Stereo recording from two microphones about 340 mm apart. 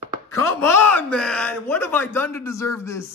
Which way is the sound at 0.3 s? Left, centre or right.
Centre.